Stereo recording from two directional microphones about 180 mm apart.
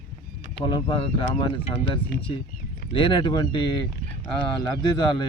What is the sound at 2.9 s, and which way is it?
Speech, 30° left (ahead or behind).